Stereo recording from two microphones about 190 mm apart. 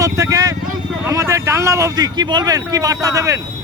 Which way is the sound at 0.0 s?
15° right (ahead or behind).